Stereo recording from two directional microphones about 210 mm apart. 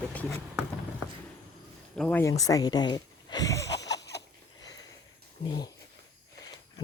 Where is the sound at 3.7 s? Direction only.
55° left (ahead or behind).